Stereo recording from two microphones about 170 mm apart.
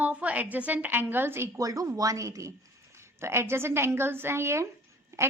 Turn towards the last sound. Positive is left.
turn(degrees=-20)  # may be behind; listen again after turning